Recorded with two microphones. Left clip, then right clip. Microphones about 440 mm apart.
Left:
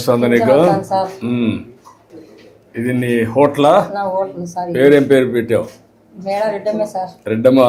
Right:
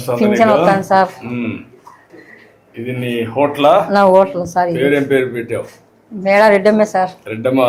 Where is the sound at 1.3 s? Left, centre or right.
Left.